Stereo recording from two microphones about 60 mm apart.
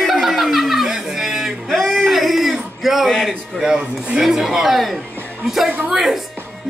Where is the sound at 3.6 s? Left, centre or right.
Centre.